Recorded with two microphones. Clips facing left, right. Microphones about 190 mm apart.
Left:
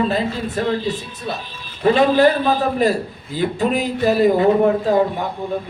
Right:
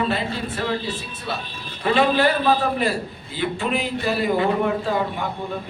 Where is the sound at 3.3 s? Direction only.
40° left (ahead or behind).